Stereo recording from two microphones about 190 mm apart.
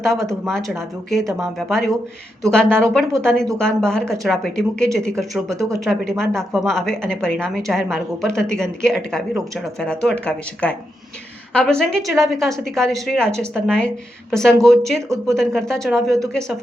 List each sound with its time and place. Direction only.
0.0 s a woman's voice: centre (ahead or behind)
1.2 s speech: 15° right (ahead or behind)
1.5 s a woman's voice: centre (ahead or behind)
5.5 s speech: 15° right (ahead or behind)
5.8 s a woman's voice: 5° left (ahead or behind)